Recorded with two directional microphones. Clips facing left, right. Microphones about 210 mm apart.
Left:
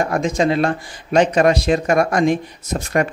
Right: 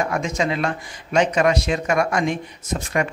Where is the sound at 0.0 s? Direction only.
35° left (ahead or behind).